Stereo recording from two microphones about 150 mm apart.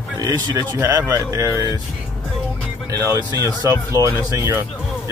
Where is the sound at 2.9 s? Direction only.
20° right (ahead or behind).